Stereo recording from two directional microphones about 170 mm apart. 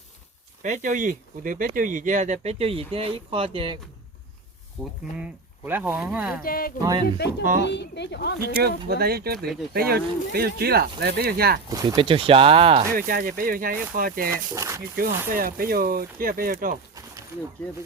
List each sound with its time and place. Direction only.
0.6 s speech: 50° right (ahead or behind); by 3.8 s 30° right (ahead or behind)
4.8 s speech: 5° left (ahead or behind)
5.1 s speech: 10° right (ahead or behind)
6.4 s speech: 60° left (ahead or behind)
7.2 s speech: 75° left (ahead or behind)
7.6 s speech: 90° left
8.5 s speech: 65° right (ahead or behind)
11.7 s speech: 20° right (ahead or behind)
12.0 s speech: 30° right (ahead or behind)
12.9 s speech: 60° right (ahead or behind)
14.5 s speech: 20° right (ahead or behind)
15.3 s speech: 60° right (ahead or behind)